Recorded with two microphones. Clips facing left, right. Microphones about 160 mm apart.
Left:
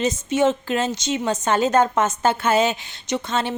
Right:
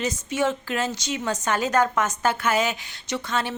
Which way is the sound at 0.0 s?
25° left (ahead or behind).